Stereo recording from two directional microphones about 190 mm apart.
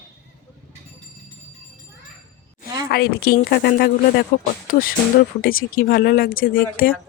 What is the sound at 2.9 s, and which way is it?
Speech, 55° left (ahead or behind).